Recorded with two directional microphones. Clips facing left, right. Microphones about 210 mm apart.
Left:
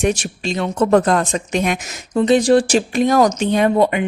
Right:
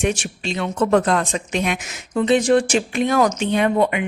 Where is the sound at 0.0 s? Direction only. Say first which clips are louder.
Left 3 dB; 40° left (ahead or behind).